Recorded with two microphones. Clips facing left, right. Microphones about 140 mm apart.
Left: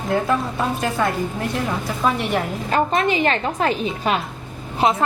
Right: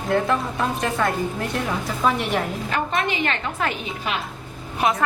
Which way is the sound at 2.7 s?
35° left (ahead or behind).